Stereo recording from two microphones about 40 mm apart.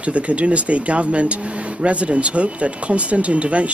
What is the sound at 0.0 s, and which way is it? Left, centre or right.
Speech, right.